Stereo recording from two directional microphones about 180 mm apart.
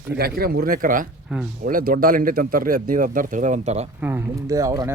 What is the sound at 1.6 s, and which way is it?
Speech, 50° right (ahead or behind).